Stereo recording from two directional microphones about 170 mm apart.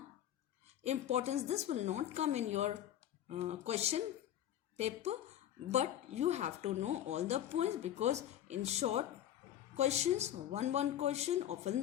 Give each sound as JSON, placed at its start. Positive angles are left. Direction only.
{"t": 0.9, "sound": "speech", "side_deg": -40}